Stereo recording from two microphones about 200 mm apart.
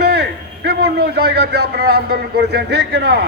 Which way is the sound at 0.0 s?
55° right (ahead or behind).